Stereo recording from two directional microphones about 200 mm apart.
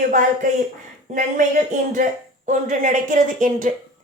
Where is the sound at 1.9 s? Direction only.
40° right (ahead or behind).